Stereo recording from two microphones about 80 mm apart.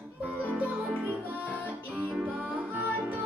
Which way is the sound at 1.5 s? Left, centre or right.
Centre.